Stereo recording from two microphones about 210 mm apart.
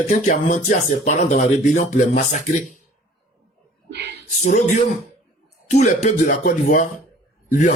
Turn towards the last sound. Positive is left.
turn(degrees=35)  # may be behind; listen again after turning